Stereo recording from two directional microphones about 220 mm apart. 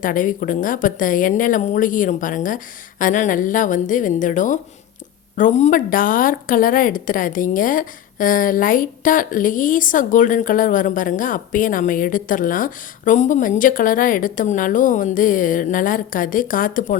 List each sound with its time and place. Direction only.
0.0 s a woman's voice: 35° left (ahead or behind)